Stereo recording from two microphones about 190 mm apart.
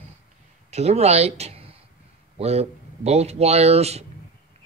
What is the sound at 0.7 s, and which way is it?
Speech, 35° right (ahead or behind).